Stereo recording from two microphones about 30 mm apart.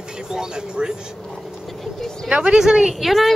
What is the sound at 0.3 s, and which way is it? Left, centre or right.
Speech, right.